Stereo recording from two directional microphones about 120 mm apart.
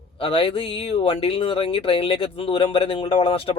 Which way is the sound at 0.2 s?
50° left (ahead or behind).